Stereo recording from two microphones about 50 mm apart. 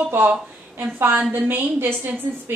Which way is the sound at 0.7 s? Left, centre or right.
Right.